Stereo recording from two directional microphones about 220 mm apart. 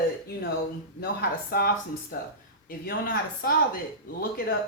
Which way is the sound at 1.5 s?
40° left (ahead or behind).